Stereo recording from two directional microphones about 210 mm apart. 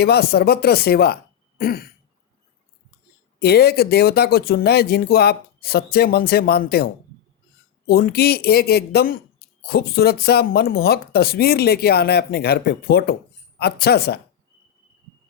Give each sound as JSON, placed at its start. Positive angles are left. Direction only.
{"t": 0.0, "sound": "speech", "side_deg": 50}
{"t": 3.4, "sound": "speech", "side_deg": 50}